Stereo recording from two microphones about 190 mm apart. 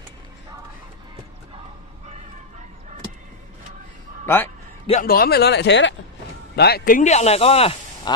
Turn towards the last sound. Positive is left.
turn(degrees=30)  # may be behind; listen again after turning